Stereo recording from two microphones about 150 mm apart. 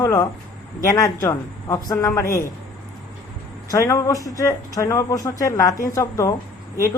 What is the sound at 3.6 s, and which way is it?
Speech, 20° left (ahead or behind).